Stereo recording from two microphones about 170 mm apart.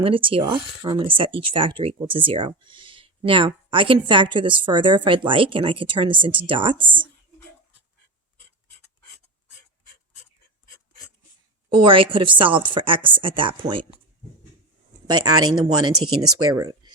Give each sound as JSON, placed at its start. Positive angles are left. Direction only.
{"t": 0.0, "sound": "speech", "side_deg": -30}
{"t": 6.7, "sound": "a woman's voice", "side_deg": -10}
{"t": 11.7, "sound": "speech", "side_deg": -30}
{"t": 15.0, "sound": "speech", "side_deg": -25}